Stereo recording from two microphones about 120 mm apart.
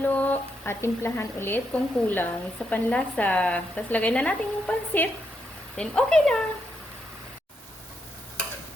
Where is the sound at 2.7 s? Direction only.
10° left (ahead or behind).